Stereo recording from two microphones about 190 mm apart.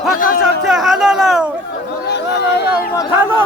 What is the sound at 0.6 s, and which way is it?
Speech, centre (ahead or behind).